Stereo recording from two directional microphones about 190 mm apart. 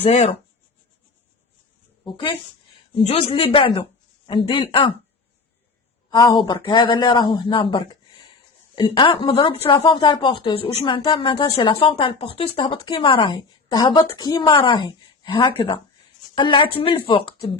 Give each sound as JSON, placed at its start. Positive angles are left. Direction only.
{"t": 0.0, "sound": "speech", "side_deg": 35}
{"t": 2.0, "sound": "a woman's voice", "side_deg": 25}
{"t": 6.1, "sound": "a woman's voice", "side_deg": 20}